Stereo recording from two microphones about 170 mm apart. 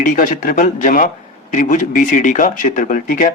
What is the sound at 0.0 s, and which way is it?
A man's voice, 50° left (ahead or behind).